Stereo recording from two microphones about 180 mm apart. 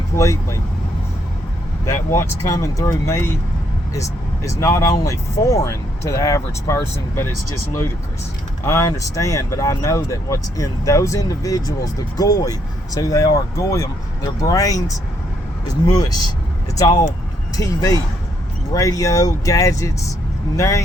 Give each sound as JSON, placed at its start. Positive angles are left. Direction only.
{"t": 1.8, "sound": "speech", "side_deg": 15}
{"t": 8.6, "sound": "speech", "side_deg": 15}